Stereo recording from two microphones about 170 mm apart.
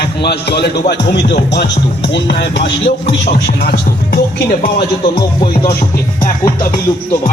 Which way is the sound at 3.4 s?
65° left (ahead or behind).